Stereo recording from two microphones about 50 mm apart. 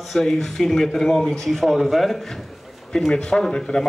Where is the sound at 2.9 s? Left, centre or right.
Centre.